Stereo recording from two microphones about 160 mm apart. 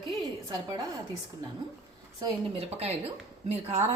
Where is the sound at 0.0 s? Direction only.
25° right (ahead or behind).